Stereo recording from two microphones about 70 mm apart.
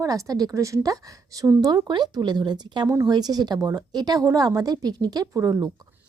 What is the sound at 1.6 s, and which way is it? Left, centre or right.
Speech, right.